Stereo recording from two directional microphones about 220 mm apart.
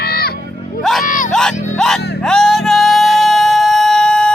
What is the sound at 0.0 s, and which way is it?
Music, 45° left (ahead or behind).